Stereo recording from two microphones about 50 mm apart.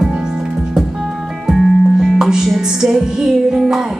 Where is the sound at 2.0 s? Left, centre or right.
Centre.